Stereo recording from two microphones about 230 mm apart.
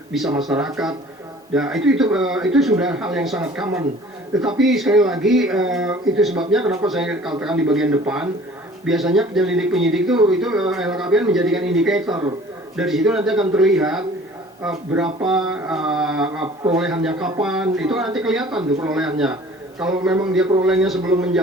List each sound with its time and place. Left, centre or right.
0.3 s speech: centre
12.0 s a man's voice: centre
12.7 s speech: centre